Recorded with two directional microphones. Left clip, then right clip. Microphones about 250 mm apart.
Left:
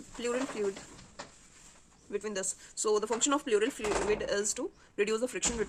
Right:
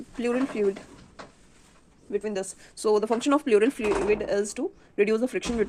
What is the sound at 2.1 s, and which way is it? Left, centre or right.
A woman's voice, centre.